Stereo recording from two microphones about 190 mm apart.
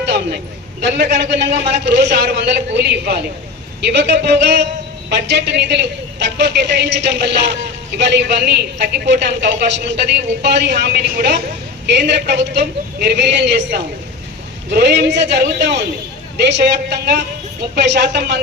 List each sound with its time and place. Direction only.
0.0 s a man's voice: 65° right (ahead or behind)